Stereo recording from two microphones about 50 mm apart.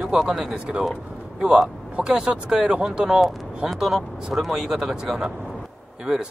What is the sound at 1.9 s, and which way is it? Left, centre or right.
Speech, centre.